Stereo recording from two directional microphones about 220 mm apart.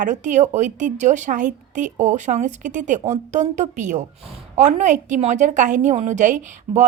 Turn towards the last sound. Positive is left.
turn(degrees=-35)  # may be behind; listen again after turning